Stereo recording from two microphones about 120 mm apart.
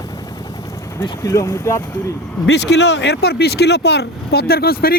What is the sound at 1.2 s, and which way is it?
Speech, 25° left (ahead or behind).